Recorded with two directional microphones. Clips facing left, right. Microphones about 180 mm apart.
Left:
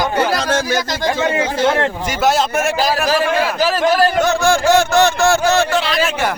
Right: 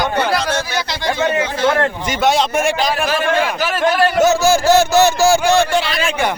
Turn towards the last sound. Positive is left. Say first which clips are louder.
# left 1 dB
turn(degrees=0)  # may be behind; listen again after turning